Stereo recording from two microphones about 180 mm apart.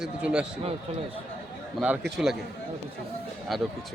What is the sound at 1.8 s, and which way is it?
Speech, 5° right (ahead or behind).